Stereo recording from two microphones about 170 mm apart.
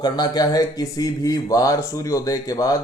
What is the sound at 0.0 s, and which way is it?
A man's voice, 25° left (ahead or behind).